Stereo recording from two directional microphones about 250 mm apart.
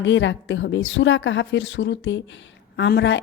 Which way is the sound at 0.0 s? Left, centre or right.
Left.